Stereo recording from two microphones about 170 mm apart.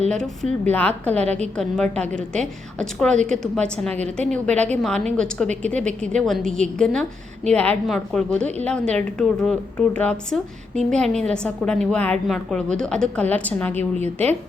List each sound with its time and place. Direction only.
0.1 s a woman's voice: 5° left (ahead or behind)
1.1 s a woman's voice: 40° right (ahead or behind)
1.5 s a woman's voice: 5° left (ahead or behind)